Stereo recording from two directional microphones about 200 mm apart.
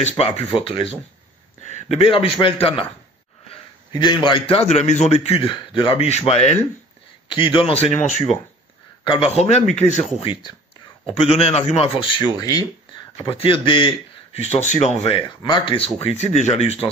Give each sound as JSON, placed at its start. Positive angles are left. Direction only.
{"t": 0.0, "sound": "a man's voice", "side_deg": 30}
{"t": 10.2, "sound": "a man's voice", "side_deg": 25}
{"t": 15.0, "sound": "speech", "side_deg": 25}